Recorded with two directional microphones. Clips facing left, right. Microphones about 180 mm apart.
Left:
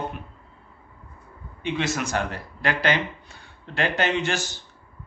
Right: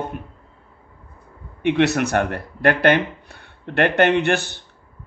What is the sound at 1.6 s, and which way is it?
Speech, 65° right (ahead or behind).